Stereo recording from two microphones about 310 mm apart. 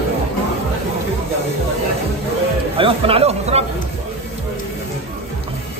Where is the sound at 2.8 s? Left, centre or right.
Centre.